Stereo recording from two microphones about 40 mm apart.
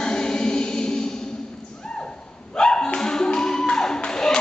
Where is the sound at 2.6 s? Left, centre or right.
Left.